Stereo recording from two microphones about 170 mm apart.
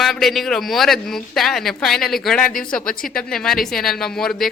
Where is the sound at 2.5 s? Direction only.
55° left (ahead or behind).